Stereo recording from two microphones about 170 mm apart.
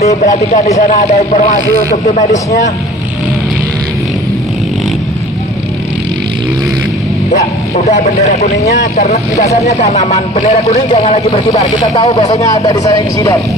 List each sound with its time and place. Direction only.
0.0 s speech: 45° left (ahead or behind)
7.7 s speech: 40° left (ahead or behind); by 13.4 s 20° left (ahead or behind)